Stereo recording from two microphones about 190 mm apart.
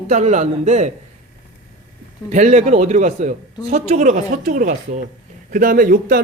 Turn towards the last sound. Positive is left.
turn(degrees=-50)  # may be behind; listen again after turning